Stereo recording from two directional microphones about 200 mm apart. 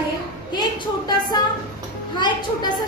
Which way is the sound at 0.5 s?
20° left (ahead or behind).